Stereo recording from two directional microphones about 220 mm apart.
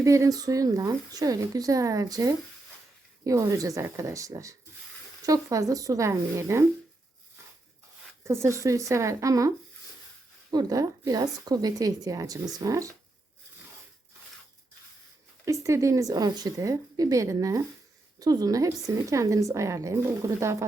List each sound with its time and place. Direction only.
0.0 s a woman's voice: 15° right (ahead or behind)
8.2 s a woman's voice: 10° right (ahead or behind)
10.5 s a woman's voice: 15° right (ahead or behind)
15.4 s a woman's voice: 15° right (ahead or behind)